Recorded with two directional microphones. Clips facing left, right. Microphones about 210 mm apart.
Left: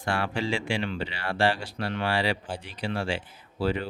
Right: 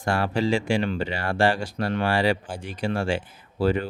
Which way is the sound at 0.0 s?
40° right (ahead or behind).